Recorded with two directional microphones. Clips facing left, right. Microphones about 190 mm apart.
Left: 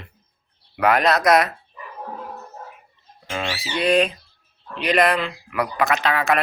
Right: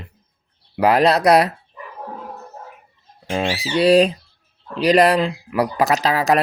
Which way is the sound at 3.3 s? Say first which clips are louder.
Right 6 dB; 30° right (ahead or behind).